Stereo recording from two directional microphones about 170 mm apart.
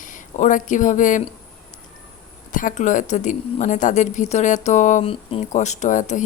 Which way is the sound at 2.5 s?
50° left (ahead or behind).